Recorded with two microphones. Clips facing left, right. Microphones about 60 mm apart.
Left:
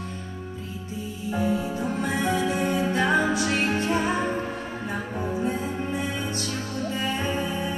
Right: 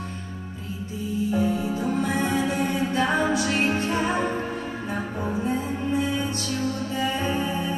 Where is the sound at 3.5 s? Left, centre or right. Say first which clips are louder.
Right 1 dB; right.